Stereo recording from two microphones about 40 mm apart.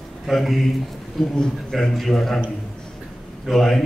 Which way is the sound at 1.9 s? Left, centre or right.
Centre.